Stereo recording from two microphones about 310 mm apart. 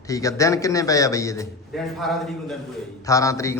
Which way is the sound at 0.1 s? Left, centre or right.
Centre.